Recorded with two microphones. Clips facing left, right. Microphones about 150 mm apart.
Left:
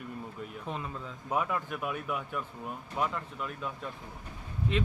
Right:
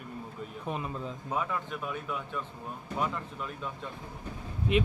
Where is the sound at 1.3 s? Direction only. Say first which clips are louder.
Left 2 dB; 10° left (ahead or behind).